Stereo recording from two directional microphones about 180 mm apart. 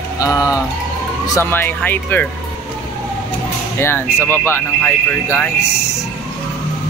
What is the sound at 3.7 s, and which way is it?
Speech, 15° left (ahead or behind).